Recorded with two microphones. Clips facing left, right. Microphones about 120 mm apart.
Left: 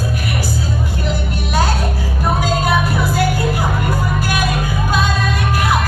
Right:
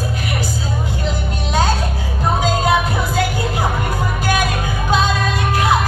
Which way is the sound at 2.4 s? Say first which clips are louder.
Right 1 dB; 20° right (ahead or behind).